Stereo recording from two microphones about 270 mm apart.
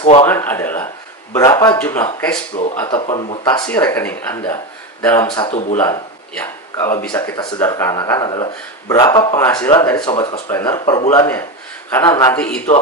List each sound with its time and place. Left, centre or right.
0.0 s speech: left
0.3 s speech: centre
3.0 s speech: centre
6.4 s speech: centre